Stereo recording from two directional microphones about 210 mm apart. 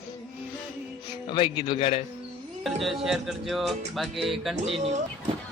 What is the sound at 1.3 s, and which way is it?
Speech, 20° left (ahead or behind).